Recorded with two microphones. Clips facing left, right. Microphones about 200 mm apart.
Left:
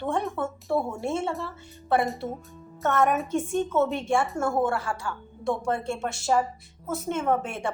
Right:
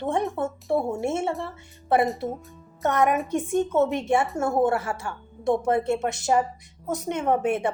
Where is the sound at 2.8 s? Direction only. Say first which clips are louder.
Right 1 dB; 15° right (ahead or behind).